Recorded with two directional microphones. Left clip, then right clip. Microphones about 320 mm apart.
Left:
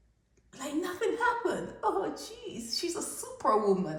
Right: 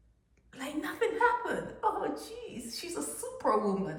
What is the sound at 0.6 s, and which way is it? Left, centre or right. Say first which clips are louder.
Chuckle: left 1 dB; centre.